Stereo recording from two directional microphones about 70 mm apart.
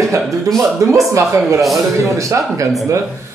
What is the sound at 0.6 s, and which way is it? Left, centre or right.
Speech, right.